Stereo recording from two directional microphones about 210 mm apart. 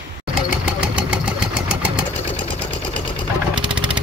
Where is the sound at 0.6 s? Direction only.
5° right (ahead or behind).